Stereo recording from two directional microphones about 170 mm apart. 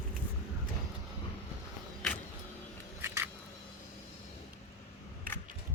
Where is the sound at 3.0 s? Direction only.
15° right (ahead or behind).